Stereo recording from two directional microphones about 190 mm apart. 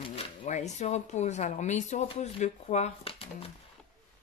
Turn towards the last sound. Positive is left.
turn(degrees=35)  # may be behind; listen again after turning